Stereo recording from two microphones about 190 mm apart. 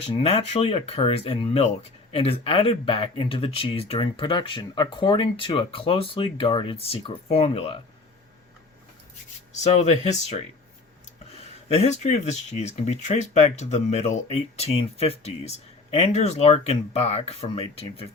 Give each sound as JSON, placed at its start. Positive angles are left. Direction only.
{"t": 0.1, "sound": "speech", "side_deg": 30}
{"t": 9.6, "sound": "speech", "side_deg": 35}